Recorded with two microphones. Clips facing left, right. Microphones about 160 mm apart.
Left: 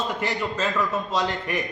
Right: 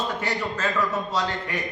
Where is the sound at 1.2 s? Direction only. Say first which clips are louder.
Left 2 dB; 15° left (ahead or behind).